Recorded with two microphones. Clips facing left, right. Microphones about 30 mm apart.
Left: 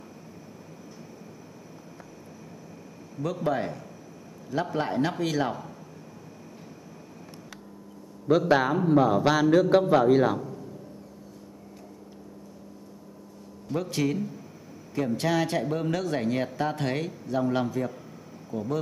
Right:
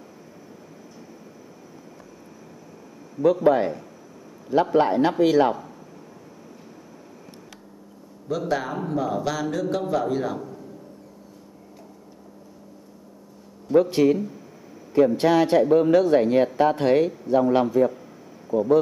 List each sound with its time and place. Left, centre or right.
3.2 s a man's voice: centre
3.5 s speech: centre
4.5 s speech: right
4.8 s speech: centre
8.3 s a man's voice: left
10.3 s a sound: centre
13.7 s speech: centre